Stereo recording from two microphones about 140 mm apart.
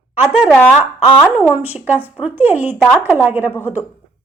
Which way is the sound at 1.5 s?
10° right (ahead or behind).